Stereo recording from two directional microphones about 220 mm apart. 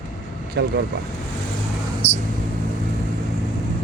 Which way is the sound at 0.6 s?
55° right (ahead or behind).